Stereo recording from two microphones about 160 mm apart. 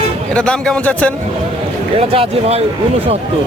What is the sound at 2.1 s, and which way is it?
Speech, 40° right (ahead or behind).